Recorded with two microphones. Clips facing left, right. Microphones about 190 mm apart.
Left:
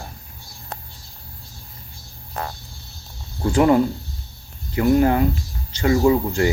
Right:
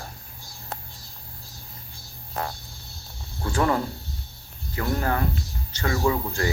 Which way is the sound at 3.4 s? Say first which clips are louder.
Left 8 dB; 20° left (ahead or behind).